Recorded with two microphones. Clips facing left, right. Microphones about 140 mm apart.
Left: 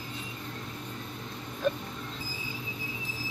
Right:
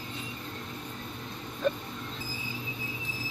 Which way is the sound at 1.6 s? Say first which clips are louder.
Even; centre (ahead or behind).